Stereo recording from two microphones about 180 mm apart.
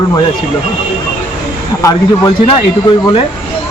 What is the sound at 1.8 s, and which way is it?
Speech, 20° left (ahead or behind).